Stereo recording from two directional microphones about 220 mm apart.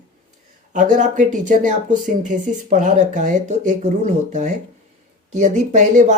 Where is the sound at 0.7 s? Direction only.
35° right (ahead or behind).